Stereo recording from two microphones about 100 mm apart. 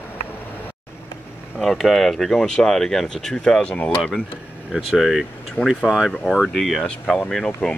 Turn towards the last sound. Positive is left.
turn(degrees=15)  # may be behind; listen again after turning